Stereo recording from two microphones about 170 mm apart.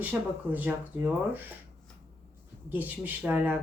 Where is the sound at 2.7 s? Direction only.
10° right (ahead or behind).